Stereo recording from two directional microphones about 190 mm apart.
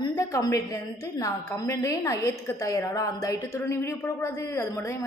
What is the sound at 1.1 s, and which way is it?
A woman's voice, 15° left (ahead or behind).